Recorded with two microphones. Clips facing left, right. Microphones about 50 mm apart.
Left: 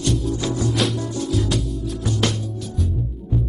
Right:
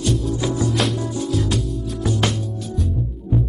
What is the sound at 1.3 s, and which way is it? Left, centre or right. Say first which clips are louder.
Music: even; centre.